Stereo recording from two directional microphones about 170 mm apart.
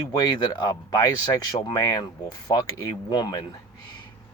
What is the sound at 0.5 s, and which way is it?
Speech, 20° left (ahead or behind).